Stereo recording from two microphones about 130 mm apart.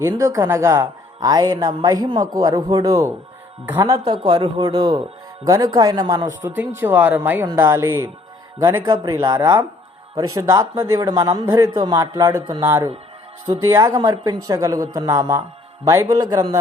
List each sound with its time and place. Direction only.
0.0 s speech: 25° right (ahead or behind)
4.2 s speech: 45° right (ahead or behind)
6.4 s speech: 15° right (ahead or behind); by 16.6 s 30° right (ahead or behind)